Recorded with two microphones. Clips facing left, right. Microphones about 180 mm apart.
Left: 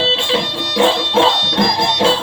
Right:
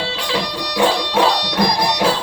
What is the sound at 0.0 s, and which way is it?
Music, 25° left (ahead or behind).